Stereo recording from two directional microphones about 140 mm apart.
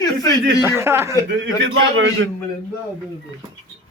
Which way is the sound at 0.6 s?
20° right (ahead or behind).